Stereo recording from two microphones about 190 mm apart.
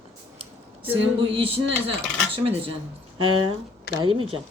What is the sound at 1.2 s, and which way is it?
Speech, 30° right (ahead or behind).